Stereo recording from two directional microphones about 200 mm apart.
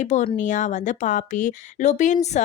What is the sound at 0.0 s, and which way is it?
Speech, 35° left (ahead or behind).